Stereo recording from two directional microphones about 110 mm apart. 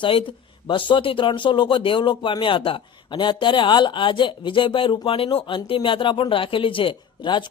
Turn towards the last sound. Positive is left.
turn(degrees=45)  # may be behind; listen again after turning